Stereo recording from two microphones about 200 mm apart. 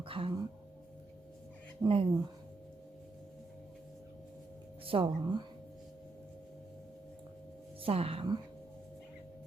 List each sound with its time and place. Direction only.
0.0 s music: 25° right (ahead or behind)
1.8 s a woman's voice: 25° right (ahead or behind)
4.9 s a woman's voice: 25° right (ahead or behind)
7.9 s a woman's voice: 30° right (ahead or behind)